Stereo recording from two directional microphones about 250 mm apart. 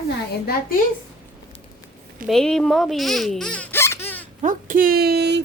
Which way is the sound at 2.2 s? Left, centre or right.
Centre.